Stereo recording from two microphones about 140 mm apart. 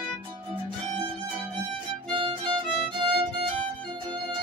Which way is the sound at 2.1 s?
35° right (ahead or behind).